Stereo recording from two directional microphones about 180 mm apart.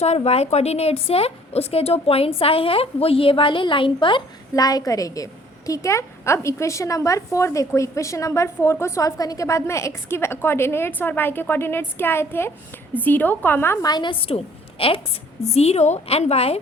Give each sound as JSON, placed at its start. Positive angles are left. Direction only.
{"t": 0.0, "sound": "a woman's voice", "side_deg": 35}